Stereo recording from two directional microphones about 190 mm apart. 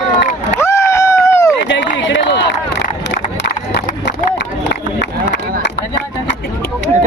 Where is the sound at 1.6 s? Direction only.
75° left (ahead or behind).